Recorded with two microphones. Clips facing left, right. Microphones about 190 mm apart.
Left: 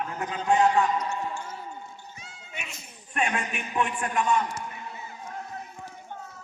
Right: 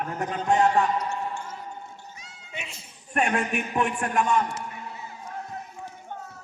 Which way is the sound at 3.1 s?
45° right (ahead or behind).